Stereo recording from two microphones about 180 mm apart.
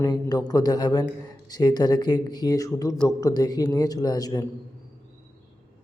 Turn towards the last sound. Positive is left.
turn(degrees=20)  # may be behind; listen again after turning